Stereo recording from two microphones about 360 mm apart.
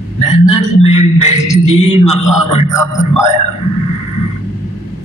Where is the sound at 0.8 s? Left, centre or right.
Centre.